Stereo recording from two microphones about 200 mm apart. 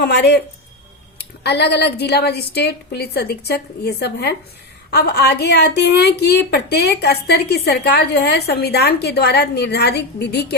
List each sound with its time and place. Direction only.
0.0 s a woman's voice: 55° left (ahead or behind)